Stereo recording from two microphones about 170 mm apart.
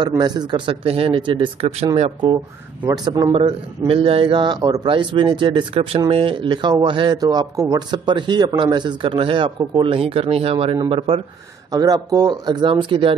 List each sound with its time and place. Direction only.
0.2 s speech: 25° right (ahead or behind)